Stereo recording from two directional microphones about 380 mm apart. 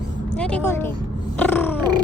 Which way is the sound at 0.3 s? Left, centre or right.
Centre.